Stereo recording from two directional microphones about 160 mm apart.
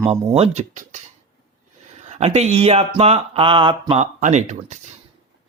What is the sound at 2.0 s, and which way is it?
Speech, 45° right (ahead or behind).